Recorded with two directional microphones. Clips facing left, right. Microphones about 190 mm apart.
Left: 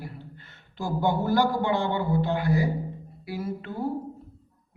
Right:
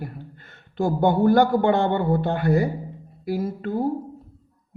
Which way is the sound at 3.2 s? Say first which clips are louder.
Right 7 dB; 45° right (ahead or behind).